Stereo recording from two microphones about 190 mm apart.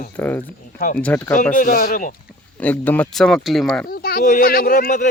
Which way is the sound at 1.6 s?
50° left (ahead or behind).